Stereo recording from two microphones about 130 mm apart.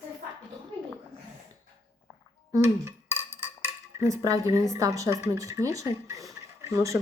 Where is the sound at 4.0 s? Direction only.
25° right (ahead or behind).